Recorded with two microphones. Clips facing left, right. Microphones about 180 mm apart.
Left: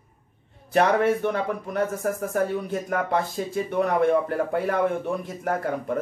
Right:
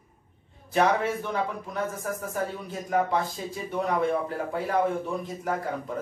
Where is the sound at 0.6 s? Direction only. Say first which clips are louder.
Left 4 dB; 60° left (ahead or behind).